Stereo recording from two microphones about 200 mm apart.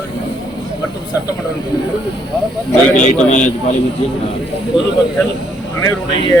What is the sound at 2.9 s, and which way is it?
Speech, 40° left (ahead or behind).